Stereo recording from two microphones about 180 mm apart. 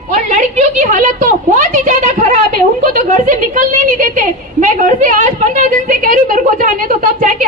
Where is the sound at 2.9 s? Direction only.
45° right (ahead or behind).